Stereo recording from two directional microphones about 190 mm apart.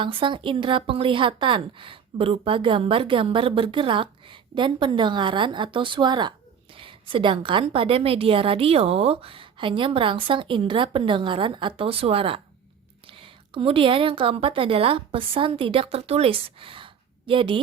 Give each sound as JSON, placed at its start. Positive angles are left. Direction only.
{"t": 0.0, "sound": "a woman's voice", "side_deg": -25}